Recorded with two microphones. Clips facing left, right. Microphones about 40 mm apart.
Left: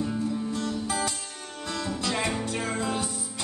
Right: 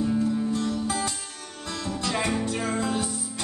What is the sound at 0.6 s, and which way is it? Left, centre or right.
Music, centre.